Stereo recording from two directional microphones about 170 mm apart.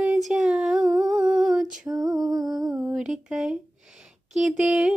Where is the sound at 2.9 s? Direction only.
5° right (ahead or behind).